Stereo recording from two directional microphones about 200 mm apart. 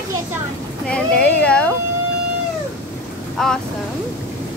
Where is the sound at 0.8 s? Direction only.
5° left (ahead or behind).